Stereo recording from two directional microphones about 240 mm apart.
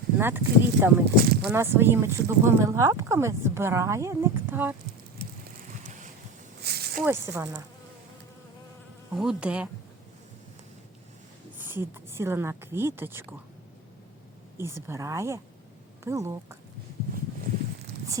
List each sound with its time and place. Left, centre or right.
0.2 s speech: centre
1.0 s speech: right
1.5 s speech: centre
6.6 s snake: right
7.0 s speech: centre
9.1 s insect: centre
11.6 s speech: centre
14.6 s speech: centre